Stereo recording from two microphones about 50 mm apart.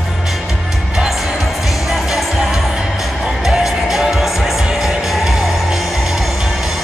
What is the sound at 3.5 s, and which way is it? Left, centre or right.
Music, centre.